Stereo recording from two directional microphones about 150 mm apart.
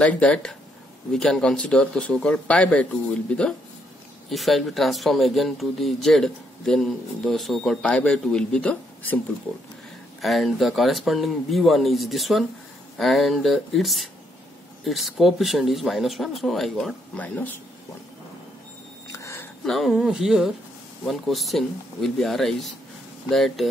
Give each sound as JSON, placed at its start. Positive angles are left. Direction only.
{"t": 0.0, "sound": "a man's voice", "side_deg": 10}
{"t": 10.2, "sound": "speech", "side_deg": 0}
{"t": 19.1, "sound": "a sound", "side_deg": 20}
{"t": 19.6, "sound": "speech", "side_deg": 0}